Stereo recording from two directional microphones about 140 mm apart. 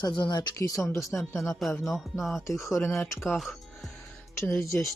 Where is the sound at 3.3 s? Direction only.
Centre (ahead or behind).